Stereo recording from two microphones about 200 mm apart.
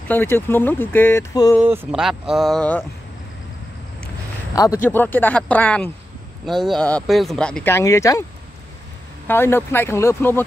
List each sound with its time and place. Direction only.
0.1 s speech: 10° left (ahead or behind)
1.6 s speech: 5° right (ahead or behind)
4.6 s speech: 15° left (ahead or behind)
9.3 s speech: 10° left (ahead or behind)